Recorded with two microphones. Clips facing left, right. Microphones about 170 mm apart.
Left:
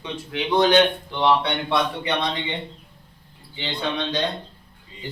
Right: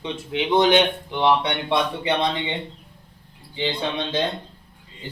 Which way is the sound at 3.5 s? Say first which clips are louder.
Right 2 dB; 25° right (ahead or behind).